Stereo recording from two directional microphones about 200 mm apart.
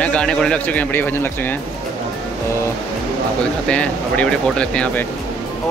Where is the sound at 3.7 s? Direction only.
5° left (ahead or behind).